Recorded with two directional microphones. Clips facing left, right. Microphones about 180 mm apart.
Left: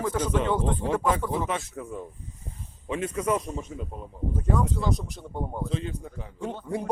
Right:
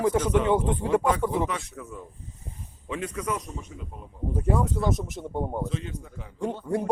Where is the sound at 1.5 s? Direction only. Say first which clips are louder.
Left 3 dB; 25° left (ahead or behind).